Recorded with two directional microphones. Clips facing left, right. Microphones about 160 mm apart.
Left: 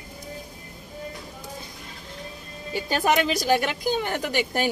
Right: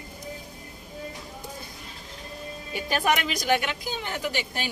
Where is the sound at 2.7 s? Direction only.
30° left (ahead or behind).